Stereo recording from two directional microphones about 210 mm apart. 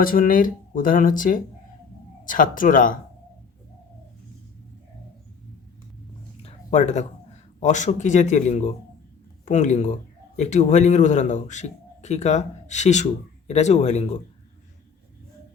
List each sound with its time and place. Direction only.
0.0 s a man's voice: 40° left (ahead or behind)
6.4 s a sound: 30° left (ahead or behind)
7.6 s a man's voice: 35° left (ahead or behind)